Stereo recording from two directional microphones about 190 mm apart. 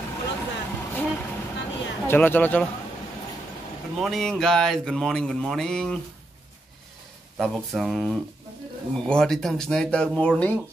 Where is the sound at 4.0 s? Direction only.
Centre (ahead or behind).